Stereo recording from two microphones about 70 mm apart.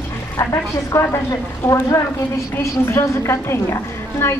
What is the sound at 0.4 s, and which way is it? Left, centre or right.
A woman's voice, left.